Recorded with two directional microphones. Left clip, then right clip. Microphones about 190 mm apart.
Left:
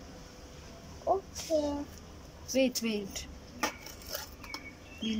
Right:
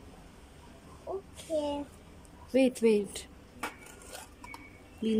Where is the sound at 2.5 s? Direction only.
25° right (ahead or behind).